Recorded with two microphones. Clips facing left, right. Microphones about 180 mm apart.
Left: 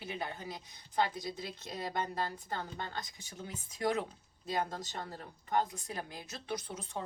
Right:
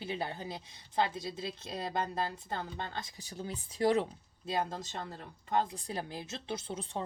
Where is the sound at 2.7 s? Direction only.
30° right (ahead or behind).